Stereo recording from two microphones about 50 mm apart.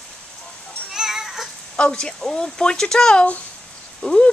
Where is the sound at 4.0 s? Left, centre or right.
Centre.